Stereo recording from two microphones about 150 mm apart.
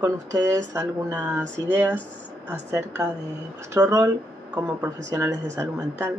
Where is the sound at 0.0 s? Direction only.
20° right (ahead or behind).